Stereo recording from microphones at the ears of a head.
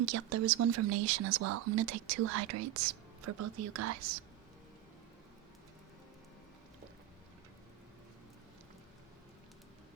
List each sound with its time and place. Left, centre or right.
0.0 s speech: right